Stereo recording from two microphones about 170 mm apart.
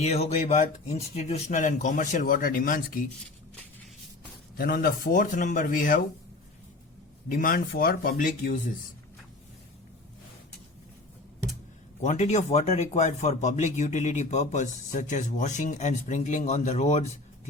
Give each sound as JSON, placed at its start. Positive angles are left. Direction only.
{"t": 0.0, "sound": "speech", "side_deg": 40}
{"t": 4.5, "sound": "speech", "side_deg": 65}
{"t": 7.3, "sound": "speech", "side_deg": 55}
{"t": 12.0, "sound": "speech", "side_deg": 45}